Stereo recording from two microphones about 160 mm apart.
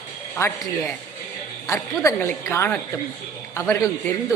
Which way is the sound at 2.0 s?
15° left (ahead or behind).